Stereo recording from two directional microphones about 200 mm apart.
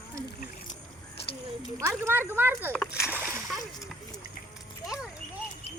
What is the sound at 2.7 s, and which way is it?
Splash, 5° left (ahead or behind).